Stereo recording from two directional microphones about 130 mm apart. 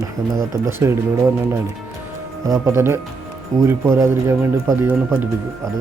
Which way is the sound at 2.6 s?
20° right (ahead or behind).